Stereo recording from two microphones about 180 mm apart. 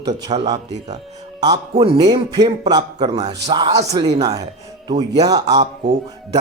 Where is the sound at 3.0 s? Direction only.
35° right (ahead or behind).